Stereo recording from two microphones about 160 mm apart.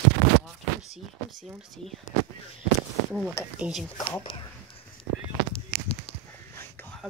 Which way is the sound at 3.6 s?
Centre (ahead or behind).